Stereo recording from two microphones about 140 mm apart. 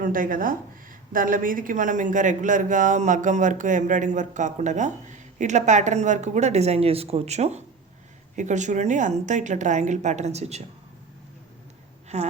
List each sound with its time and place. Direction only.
0.0 s speech: 80° right; by 10.6 s 50° right (ahead or behind)
12.0 s speech: 50° right (ahead or behind)